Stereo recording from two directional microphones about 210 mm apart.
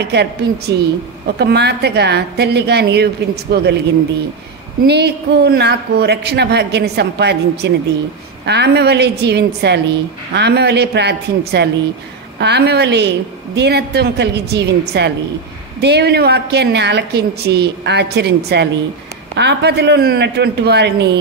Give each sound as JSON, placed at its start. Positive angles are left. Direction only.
{"t": 0.0, "sound": "a woman's voice", "side_deg": -50}
{"t": 4.8, "sound": "a woman's voice", "side_deg": -50}